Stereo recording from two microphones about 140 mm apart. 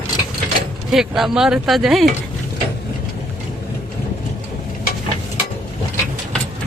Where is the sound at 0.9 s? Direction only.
Centre (ahead or behind).